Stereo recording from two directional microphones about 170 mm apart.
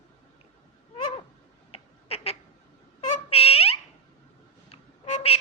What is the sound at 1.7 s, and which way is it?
Duck, 35° left (ahead or behind).